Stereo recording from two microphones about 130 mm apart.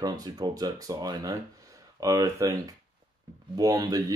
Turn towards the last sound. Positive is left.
turn(degrees=-30)  # may be behind; listen again after turning